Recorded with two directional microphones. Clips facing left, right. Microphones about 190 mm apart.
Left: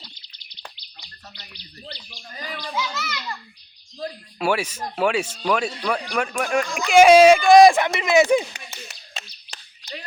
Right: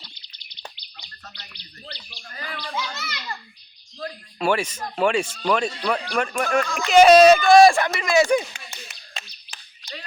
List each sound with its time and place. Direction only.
2.3 s speech: 15° left (ahead or behind)
3.0 s a child's voice: 30° right (ahead or behind)
3.9 s speech: 10° left (ahead or behind)
8.9 s finger snapping: 40° left (ahead or behind)